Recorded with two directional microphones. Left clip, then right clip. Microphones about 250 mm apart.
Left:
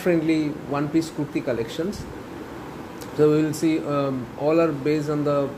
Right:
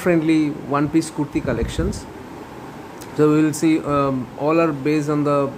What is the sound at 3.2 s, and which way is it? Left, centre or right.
Speech, centre.